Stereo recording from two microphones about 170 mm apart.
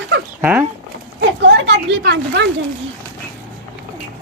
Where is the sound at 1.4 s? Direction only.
90° right.